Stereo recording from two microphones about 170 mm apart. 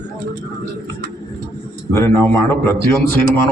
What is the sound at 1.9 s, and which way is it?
A man's voice, 15° left (ahead or behind).